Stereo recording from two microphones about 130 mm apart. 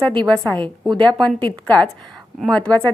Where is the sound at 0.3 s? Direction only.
10° left (ahead or behind).